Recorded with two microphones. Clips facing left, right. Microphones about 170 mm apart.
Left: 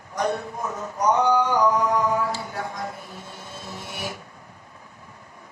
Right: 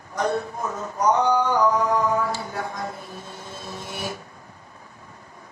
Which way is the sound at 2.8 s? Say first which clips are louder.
Right 1 dB; 15° left (ahead or behind).